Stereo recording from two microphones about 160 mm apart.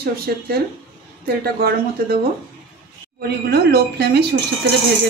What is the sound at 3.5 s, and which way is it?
Speech, 85° right.